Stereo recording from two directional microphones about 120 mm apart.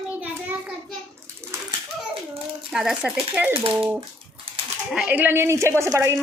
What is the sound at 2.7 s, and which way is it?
Speech, 5° right (ahead or behind).